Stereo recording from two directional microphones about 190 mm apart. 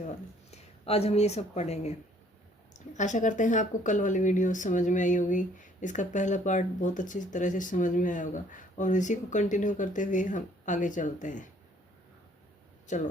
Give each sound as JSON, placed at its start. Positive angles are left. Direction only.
{"t": 0.5, "sound": "speech", "side_deg": 30}
{"t": 12.9, "sound": "speech", "side_deg": 40}